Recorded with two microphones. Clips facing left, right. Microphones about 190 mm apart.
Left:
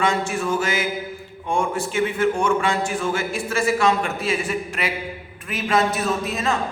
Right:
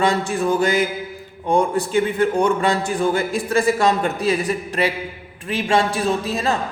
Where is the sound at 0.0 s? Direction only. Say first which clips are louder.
Right 3 dB; 35° right (ahead or behind).